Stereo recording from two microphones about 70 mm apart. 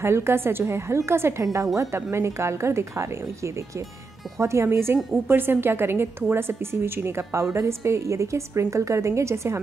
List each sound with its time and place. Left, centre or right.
0.0 s a woman's voice: right